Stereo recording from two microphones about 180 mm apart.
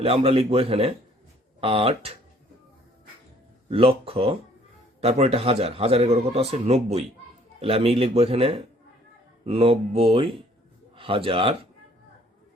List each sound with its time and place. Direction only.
0.0 s speech: 35° right (ahead or behind)
3.7 s a man's voice: 35° right (ahead or behind)